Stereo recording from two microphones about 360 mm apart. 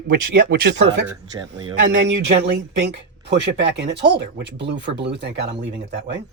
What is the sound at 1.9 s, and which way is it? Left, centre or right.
Speech, right.